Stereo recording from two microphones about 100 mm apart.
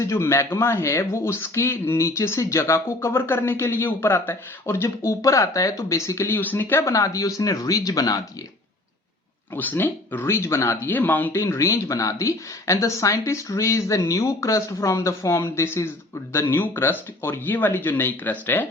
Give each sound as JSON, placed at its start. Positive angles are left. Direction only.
{"t": 0.0, "sound": "speech", "side_deg": 25}
{"t": 9.6, "sound": "speech", "side_deg": 20}